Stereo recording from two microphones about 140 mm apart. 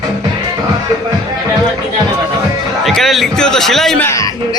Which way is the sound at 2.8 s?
Centre (ahead or behind).